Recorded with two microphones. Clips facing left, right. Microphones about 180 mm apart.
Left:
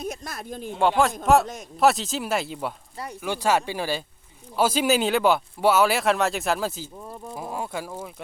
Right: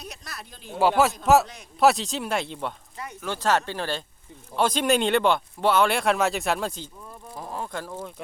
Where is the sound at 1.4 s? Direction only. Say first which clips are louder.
Left 8 dB; 45° left (ahead or behind).